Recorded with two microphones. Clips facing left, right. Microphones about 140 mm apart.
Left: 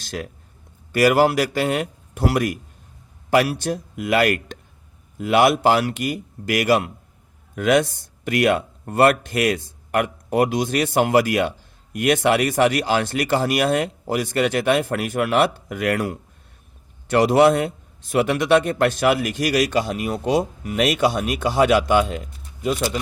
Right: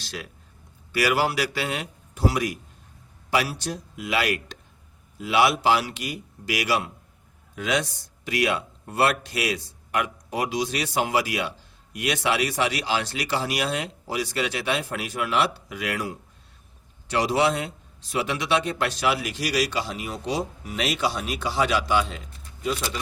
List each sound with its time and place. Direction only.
0.0 s a man's voice: 50° left (ahead or behind)